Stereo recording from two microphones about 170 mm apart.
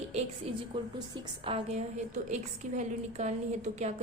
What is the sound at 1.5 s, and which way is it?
A woman's voice, 35° right (ahead or behind).